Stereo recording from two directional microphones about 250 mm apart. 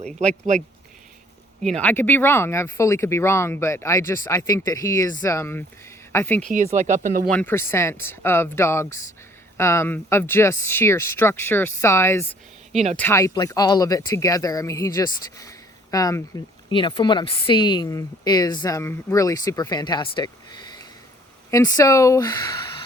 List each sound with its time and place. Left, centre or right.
1.6 s speech: centre
6.7 s speech: right
7.3 s speech: centre